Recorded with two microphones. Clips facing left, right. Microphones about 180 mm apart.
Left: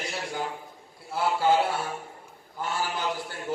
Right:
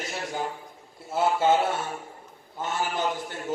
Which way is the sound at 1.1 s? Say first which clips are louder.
Right 2 dB; 20° right (ahead or behind).